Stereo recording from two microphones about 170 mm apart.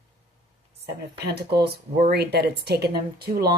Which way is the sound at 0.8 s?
70° right (ahead or behind).